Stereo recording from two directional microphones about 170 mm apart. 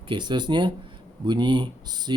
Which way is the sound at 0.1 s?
25° right (ahead or behind).